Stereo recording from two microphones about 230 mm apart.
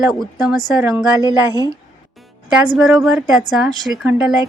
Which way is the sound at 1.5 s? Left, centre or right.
Centre.